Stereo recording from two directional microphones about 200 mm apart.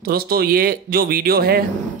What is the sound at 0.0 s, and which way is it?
Speech, 50° right (ahead or behind).